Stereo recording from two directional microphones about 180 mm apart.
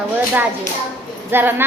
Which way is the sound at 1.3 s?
10° right (ahead or behind).